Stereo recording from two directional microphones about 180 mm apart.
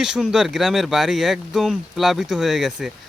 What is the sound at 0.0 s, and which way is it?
Speech, centre (ahead or behind).